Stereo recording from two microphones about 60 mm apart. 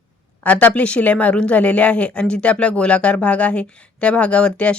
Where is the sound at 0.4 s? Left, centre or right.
Left.